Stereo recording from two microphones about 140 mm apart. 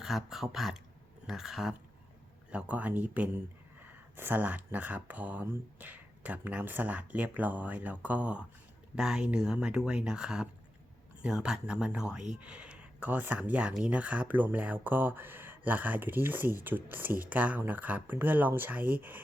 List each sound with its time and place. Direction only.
0.0 s speech: 5° right (ahead or behind)